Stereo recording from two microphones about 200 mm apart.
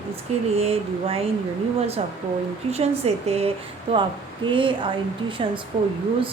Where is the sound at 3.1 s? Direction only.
30° right (ahead or behind).